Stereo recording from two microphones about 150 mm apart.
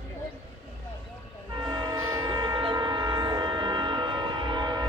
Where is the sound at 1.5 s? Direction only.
30° right (ahead or behind).